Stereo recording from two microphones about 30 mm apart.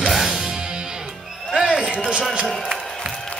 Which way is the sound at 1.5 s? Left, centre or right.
Centre.